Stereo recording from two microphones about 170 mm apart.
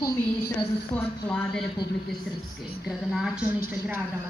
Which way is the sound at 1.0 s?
5° left (ahead or behind).